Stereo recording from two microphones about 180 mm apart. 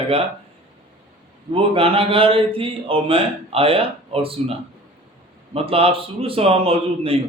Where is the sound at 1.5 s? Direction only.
30° right (ahead or behind).